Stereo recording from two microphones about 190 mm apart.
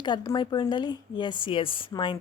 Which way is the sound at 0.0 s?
25° left (ahead or behind).